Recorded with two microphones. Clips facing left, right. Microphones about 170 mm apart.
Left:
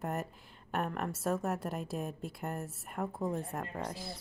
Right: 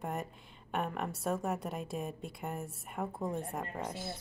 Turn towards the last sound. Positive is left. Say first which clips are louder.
# even
turn(degrees=0)  # may be behind; listen again after turning